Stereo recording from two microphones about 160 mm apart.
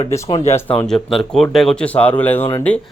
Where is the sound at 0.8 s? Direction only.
5° left (ahead or behind).